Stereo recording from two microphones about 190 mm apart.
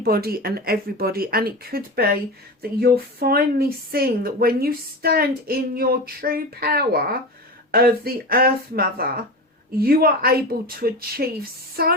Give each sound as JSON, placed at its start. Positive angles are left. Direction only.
{"t": 0.0, "sound": "a woman's voice", "side_deg": -55}